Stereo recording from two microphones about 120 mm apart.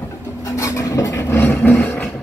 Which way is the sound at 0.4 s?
30° left (ahead or behind).